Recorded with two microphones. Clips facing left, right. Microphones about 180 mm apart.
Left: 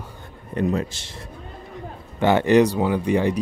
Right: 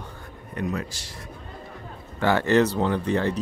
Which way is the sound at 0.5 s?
30° left (ahead or behind).